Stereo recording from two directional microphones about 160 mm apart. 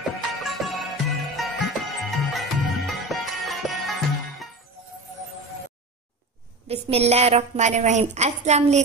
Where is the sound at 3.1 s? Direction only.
Centre (ahead or behind).